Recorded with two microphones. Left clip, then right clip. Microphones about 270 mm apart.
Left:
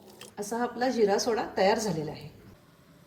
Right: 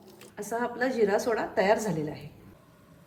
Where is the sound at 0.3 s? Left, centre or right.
Centre.